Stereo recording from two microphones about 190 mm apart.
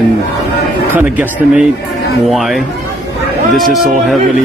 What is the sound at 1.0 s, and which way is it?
Speech, 10° right (ahead or behind).